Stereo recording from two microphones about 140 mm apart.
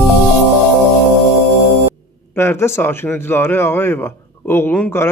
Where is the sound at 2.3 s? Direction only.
20° left (ahead or behind).